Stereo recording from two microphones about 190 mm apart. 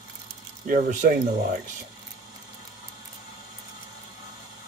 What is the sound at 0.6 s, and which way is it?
Speech, 45° right (ahead or behind).